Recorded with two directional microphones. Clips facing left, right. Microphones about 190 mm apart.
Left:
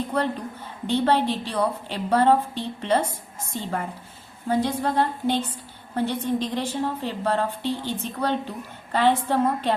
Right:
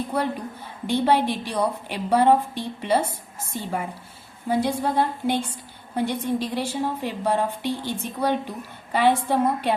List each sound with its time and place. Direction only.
0.0 s a woman's voice: 10° right (ahead or behind)